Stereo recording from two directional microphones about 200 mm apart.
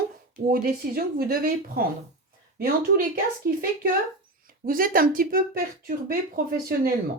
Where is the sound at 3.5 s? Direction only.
45° right (ahead or behind).